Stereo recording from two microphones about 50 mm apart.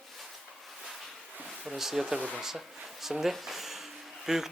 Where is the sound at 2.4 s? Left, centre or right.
Centre.